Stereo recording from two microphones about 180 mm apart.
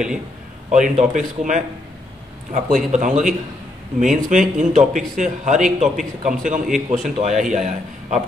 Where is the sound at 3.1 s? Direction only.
5° right (ahead or behind).